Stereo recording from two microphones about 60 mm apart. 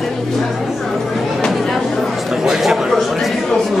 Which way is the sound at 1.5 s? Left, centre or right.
Centre.